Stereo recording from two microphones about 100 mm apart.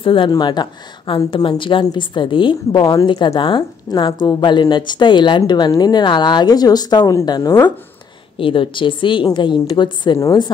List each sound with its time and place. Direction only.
0.0 s speech: 60° left (ahead or behind)
0.3 s a woman's voice: 45° left (ahead or behind)
2.8 s a woman's voice: 35° left (ahead or behind)
3.3 s a woman's voice: 55° left (ahead or behind)
8.4 s a woman's voice: 60° left (ahead or behind)
10.1 s a woman's voice: 40° left (ahead or behind)